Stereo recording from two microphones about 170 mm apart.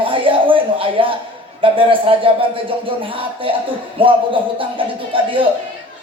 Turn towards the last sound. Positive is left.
turn(degrees=-30)  # may be behind; listen again after turning